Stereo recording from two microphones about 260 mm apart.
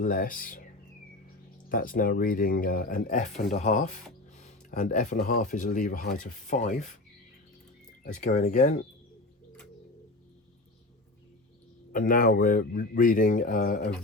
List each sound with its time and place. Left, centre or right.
0.0 s speech: left
1.7 s speech: left
8.0 s speech: left
11.9 s speech: left